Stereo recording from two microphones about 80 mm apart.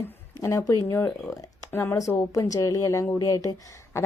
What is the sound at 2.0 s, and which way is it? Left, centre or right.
A woman's voice, left.